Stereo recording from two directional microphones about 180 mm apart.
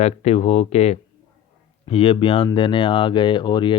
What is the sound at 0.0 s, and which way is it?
Speech, 35° left (ahead or behind).